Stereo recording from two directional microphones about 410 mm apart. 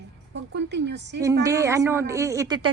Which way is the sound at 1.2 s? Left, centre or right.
Centre.